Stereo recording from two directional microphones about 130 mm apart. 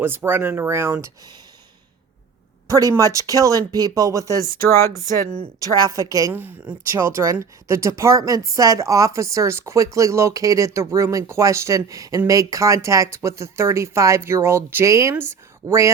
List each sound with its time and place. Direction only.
0.0 s speech: 15° right (ahead or behind)
1.0 s speech: 30° right (ahead or behind)
2.6 s speech: 25° right (ahead or behind)
5.5 s speech: 25° right (ahead or behind)
6.3 s speech: 15° right (ahead or behind)